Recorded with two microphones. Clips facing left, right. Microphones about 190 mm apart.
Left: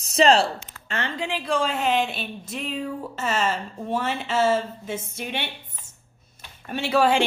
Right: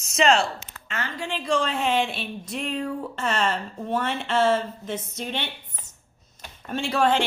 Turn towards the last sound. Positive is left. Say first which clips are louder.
# left 2 dB
turn(degrees=5)  # may be behind; listen again after turning